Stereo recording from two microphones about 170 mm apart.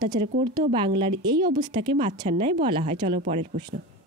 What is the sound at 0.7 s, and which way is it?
Speech, 30° right (ahead or behind).